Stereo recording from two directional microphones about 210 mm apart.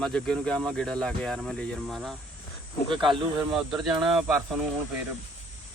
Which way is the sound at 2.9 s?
25° right (ahead or behind).